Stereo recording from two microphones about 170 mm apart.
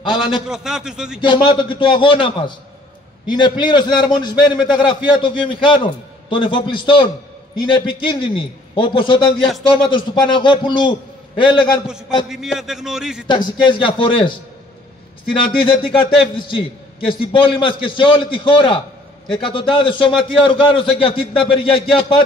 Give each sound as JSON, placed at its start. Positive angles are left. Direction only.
{"t": 0.0, "sound": "a man's voice", "side_deg": 30}
{"t": 0.5, "sound": "a man's voice", "side_deg": -5}
{"t": 1.2, "sound": "a man's voice", "side_deg": 25}
{"t": 12.3, "sound": "a man's voice", "side_deg": 0}
{"t": 13.3, "sound": "a man's voice", "side_deg": 25}
{"t": 15.3, "sound": "a man's voice", "side_deg": 30}